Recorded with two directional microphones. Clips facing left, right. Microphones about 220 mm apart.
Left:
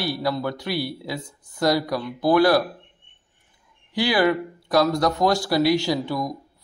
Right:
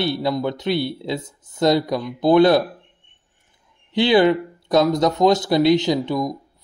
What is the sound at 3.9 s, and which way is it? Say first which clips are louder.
A man's voice: right 5 dB; 25° right (ahead or behind).